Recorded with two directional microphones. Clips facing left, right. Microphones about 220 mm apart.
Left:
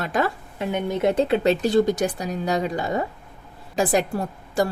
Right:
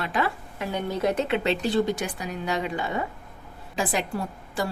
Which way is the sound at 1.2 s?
40° left (ahead or behind).